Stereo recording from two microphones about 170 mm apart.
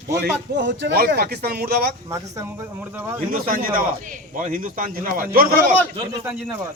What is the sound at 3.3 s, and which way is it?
A man's voice, 55° right (ahead or behind).